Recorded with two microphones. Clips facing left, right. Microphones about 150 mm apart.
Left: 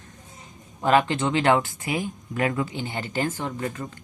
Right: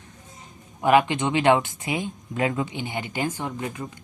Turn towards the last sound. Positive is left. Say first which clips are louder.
# left 1 dB
turn(degrees=-15)  # may be behind; listen again after turning